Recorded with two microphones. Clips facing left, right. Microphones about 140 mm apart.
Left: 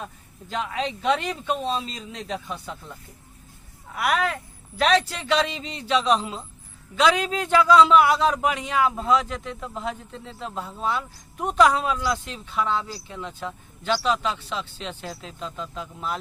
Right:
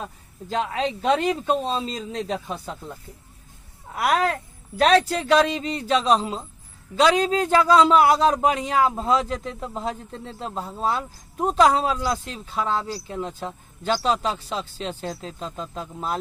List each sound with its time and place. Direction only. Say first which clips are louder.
0.5 s a man's voice: right 3 dB; 35° right (ahead or behind)
3.9 s a man's voice: right 2 dB; 35° right (ahead or behind)